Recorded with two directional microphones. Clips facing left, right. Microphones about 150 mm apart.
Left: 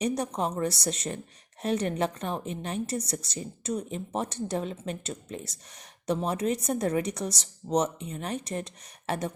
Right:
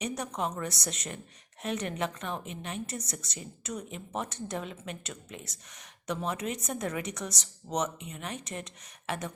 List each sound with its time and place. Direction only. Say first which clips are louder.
0.0 s a woman's voice: left 5 dB; 35° left (ahead or behind)